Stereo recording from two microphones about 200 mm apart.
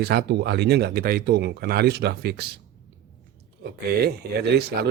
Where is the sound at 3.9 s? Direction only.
55° right (ahead or behind).